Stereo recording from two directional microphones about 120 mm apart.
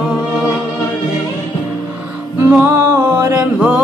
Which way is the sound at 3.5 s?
10° right (ahead or behind).